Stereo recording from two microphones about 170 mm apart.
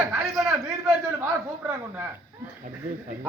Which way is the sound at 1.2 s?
10° right (ahead or behind).